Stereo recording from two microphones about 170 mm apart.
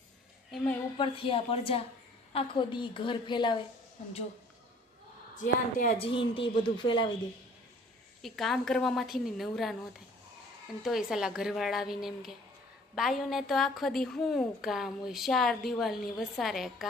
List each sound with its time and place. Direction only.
0.5 s a woman's voice: 5° left (ahead or behind)
0.9 s a woman's voice: 30° left (ahead or behind)
5.8 s a woman's voice: 40° left (ahead or behind)
8.2 s a woman's voice: centre (ahead or behind)
10.8 s a woman's voice: centre (ahead or behind)